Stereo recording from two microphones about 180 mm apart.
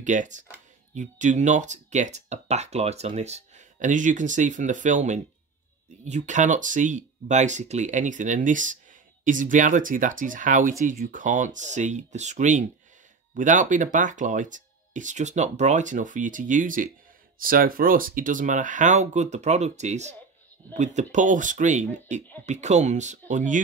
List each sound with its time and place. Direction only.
0.0 s speech: 45° right (ahead or behind)